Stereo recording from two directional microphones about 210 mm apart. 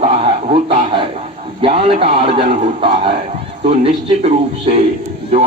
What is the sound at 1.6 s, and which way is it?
A man's voice, 25° right (ahead or behind).